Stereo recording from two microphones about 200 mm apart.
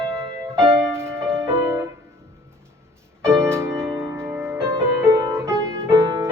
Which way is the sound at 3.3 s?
15° right (ahead or behind).